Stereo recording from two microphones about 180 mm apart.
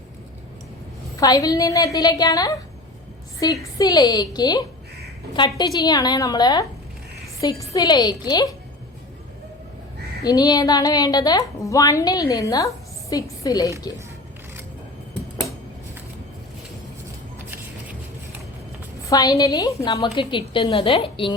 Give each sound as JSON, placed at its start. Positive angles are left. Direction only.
{"t": 1.2, "sound": "a woman's voice", "side_deg": 20}
{"t": 10.2, "sound": "a woman's voice", "side_deg": 20}
{"t": 19.0, "sound": "a woman's voice", "side_deg": 20}